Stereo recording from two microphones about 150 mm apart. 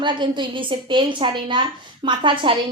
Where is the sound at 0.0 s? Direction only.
30° right (ahead or behind).